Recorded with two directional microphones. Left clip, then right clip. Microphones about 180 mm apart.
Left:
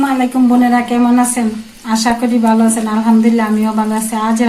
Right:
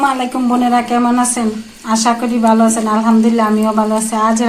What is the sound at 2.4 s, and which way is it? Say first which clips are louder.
A woman's voice: right 1 dB; 25° right (ahead or behind).